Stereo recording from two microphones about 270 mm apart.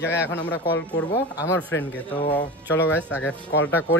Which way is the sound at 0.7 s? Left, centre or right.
Centre.